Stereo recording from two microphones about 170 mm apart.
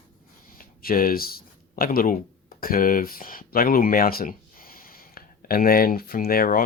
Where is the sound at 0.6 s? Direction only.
55° left (ahead or behind).